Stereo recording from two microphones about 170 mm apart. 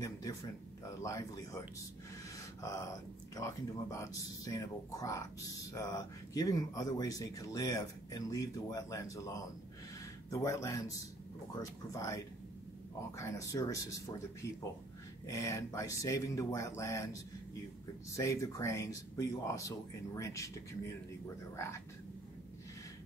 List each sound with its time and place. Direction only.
0.0 s speech: 20° left (ahead or behind)
3.3 s speech: 20° left (ahead or behind)